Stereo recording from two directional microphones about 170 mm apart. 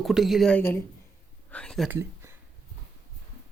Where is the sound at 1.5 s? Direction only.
5° left (ahead or behind).